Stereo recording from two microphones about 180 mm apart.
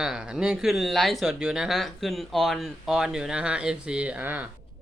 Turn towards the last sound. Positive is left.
turn(degrees=-10)  # may be behind; listen again after turning